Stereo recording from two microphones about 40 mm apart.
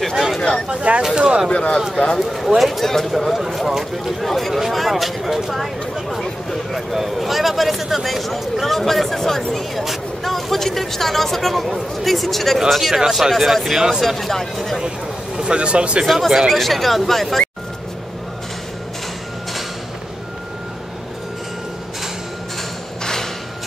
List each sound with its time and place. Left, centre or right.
0.0 s a sound: centre
0.7 s a sound: right
1.1 s speech: right
1.5 s speech: left
2.6 s speech: centre
14.0 s speech: centre
15.3 s speech: right
16.1 s speech: centre